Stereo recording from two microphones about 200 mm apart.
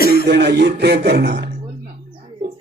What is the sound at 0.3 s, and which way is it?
Music, 55° right (ahead or behind).